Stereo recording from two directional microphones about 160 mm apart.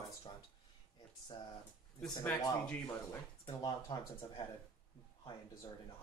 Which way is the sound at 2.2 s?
10° left (ahead or behind).